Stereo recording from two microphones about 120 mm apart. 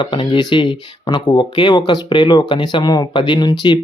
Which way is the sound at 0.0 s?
40° left (ahead or behind).